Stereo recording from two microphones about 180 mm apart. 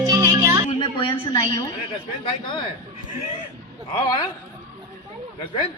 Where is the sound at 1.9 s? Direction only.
30° left (ahead or behind).